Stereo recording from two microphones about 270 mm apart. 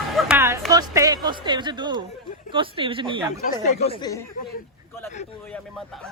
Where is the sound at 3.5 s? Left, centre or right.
Left.